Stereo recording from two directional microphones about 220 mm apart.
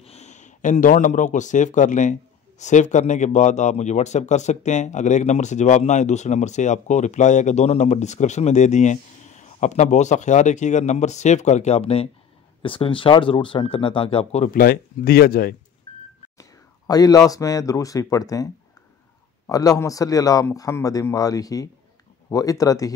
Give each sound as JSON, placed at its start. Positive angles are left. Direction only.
{"t": 0.0, "sound": "speech", "side_deg": 30}
{"t": 15.9, "sound": "vehicle", "side_deg": 20}
{"t": 16.3, "sound": "speech", "side_deg": 15}